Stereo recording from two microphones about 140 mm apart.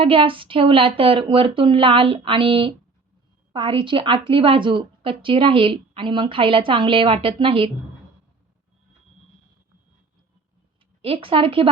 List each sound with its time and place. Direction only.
0.0 s a woman's voice: 40° right (ahead or behind)
11.0 s a woman's voice: 40° right (ahead or behind)